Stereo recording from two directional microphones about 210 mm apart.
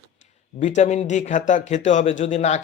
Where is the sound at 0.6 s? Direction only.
35° left (ahead or behind).